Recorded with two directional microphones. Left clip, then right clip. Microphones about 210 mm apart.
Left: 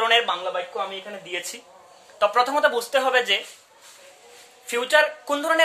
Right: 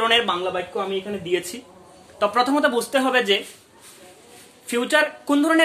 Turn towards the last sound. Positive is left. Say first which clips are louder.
# right 3 dB
turn(degrees=5)  # may be behind; listen again after turning